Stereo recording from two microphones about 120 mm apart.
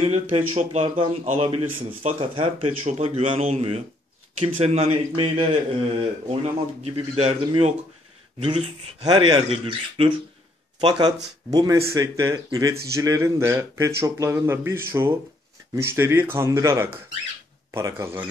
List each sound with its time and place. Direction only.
0.1 s speech: 65° right (ahead or behind)
0.8 s speech: 45° right (ahead or behind); by 7.7 s 60° right (ahead or behind)
9.0 s a man's voice: 35° right (ahead or behind)
9.5 s speech: 50° right (ahead or behind)
10.8 s speech: 35° right (ahead or behind)